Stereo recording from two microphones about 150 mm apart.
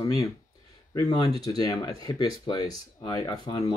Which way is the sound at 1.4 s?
25° left (ahead or behind).